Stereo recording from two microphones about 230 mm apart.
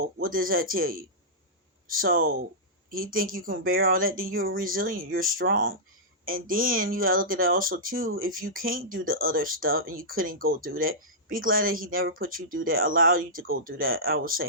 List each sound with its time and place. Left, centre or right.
0.2 s speech: right